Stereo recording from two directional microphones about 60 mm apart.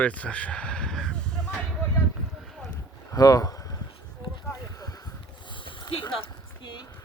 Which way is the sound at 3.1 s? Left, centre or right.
Left.